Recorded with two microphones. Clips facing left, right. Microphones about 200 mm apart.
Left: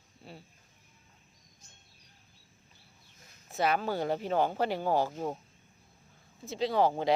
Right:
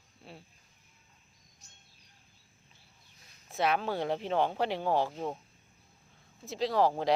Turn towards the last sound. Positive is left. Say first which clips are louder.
# even
turn(degrees=0)  # may be behind; listen again after turning